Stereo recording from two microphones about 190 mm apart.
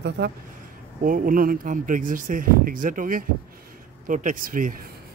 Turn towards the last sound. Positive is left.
turn(degrees=-45)  # may be behind; listen again after turning